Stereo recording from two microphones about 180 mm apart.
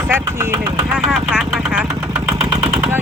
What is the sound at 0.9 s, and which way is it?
Vehicle, 5° right (ahead or behind).